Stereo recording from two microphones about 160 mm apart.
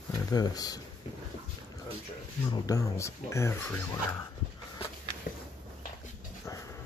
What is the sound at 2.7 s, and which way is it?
Speech, 20° left (ahead or behind).